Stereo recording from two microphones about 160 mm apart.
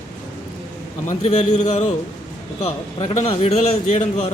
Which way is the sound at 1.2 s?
45° left (ahead or behind).